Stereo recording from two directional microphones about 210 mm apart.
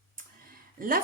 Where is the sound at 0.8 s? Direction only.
40° right (ahead or behind).